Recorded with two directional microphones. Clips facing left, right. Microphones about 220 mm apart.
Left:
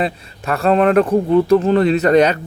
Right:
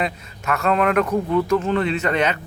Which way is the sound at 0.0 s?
35° left (ahead or behind).